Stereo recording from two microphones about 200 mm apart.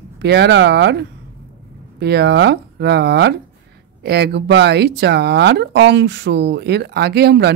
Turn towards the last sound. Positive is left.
turn(degrees=-55)  # may be behind; listen again after turning